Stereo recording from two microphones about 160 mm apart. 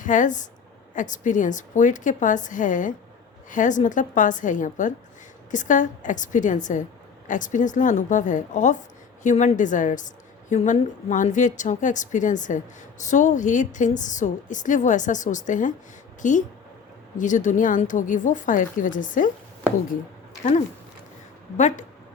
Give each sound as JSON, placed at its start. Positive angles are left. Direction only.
{"t": 0.0, "sound": "a woman's voice", "side_deg": 55}